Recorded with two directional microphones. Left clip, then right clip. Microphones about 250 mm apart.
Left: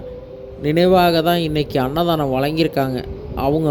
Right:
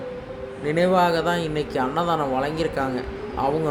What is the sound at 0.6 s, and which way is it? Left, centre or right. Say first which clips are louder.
Speech: left 5 dB; left.